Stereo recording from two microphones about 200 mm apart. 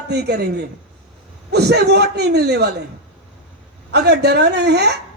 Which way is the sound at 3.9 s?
55° right (ahead or behind).